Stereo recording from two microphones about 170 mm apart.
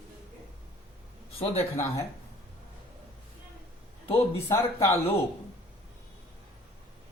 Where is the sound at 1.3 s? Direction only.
35° left (ahead or behind).